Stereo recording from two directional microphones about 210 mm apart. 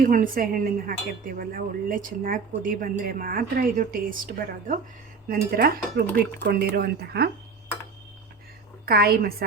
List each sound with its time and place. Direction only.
0.0 s speech: 40° right (ahead or behind)
8.9 s speech: 45° right (ahead or behind)